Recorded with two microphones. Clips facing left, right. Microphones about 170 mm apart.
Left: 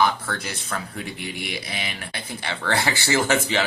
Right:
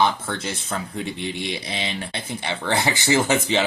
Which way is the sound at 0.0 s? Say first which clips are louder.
Right 1 dB; 25° right (ahead or behind).